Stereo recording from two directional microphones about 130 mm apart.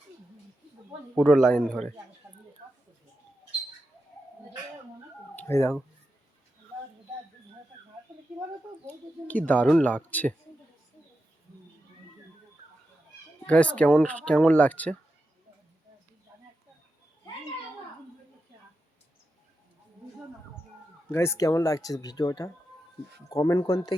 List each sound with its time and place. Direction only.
1.2 s speech: 5° left (ahead or behind)
2.3 s a sound: centre (ahead or behind)
5.4 s speech: 20° left (ahead or behind)
9.2 s speech: 10° left (ahead or behind)
13.5 s speech: 10° left (ahead or behind)
21.1 s speech: 20° left (ahead or behind)